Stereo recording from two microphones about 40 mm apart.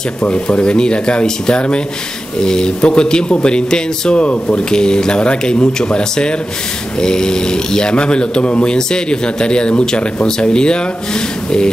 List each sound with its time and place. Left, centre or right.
0.2 s speech: left